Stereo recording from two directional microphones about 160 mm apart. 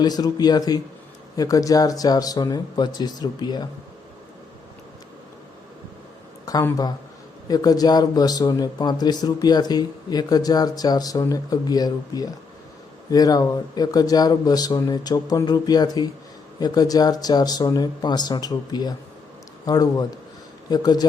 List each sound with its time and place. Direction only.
0.0 s speech: 25° left (ahead or behind)
6.4 s speech: 20° left (ahead or behind)